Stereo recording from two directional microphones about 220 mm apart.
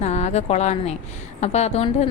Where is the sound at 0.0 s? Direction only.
30° left (ahead or behind).